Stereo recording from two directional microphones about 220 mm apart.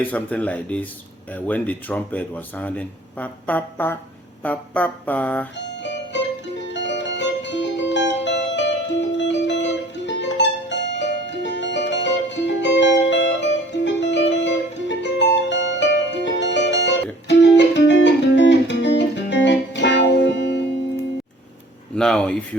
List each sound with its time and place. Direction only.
0.1 s speech: 5° left (ahead or behind)
6.7 s music: 55° left (ahead or behind)
21.9 s speech: 5° left (ahead or behind)